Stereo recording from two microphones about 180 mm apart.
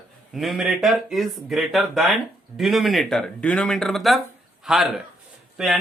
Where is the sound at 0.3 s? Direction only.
Centre (ahead or behind).